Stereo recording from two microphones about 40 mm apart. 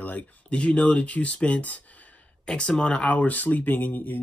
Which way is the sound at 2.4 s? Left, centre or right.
Centre.